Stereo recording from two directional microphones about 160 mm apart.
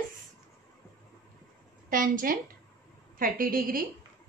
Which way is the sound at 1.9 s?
60° right (ahead or behind).